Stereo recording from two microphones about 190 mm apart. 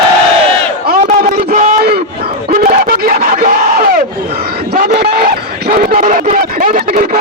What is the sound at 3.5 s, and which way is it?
Battle cry, 50° right (ahead or behind).